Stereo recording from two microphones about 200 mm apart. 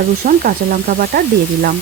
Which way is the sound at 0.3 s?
45° right (ahead or behind).